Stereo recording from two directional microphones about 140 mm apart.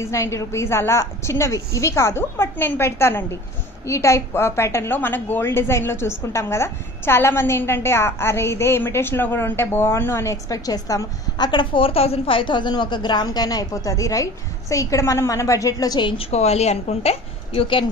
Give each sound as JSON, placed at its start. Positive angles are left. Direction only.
{"t": 0.0, "sound": "a woman's voice", "side_deg": 20}
{"t": 16.3, "sound": "a woman's voice", "side_deg": 50}